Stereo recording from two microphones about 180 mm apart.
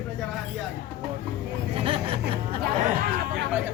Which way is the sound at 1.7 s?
30° right (ahead or behind).